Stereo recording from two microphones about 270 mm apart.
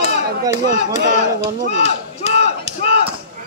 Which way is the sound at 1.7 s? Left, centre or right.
Left.